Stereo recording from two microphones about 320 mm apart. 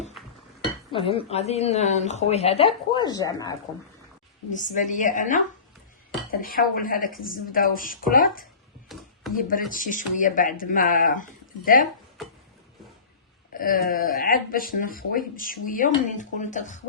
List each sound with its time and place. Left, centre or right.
0.9 s speech: centre
4.5 s speech: left
8.9 s a sound: centre
9.3 s speech: left
13.5 s speech: left